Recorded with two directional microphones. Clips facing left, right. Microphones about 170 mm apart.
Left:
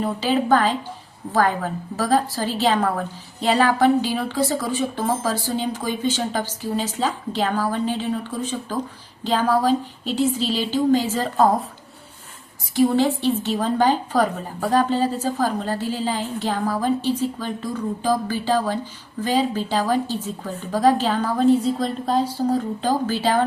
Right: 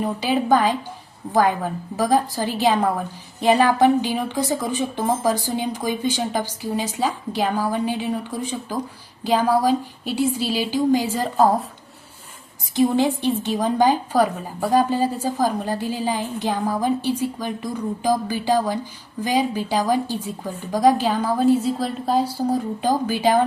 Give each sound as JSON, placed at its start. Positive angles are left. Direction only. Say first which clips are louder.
{"t": 0.0, "sound": "a woman's voice", "louder": "even", "side_deg": -15}
{"t": 12.7, "sound": "a woman's voice", "louder": "even", "side_deg": -15}